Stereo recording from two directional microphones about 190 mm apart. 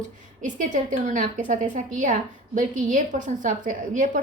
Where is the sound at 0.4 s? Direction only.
40° right (ahead or behind).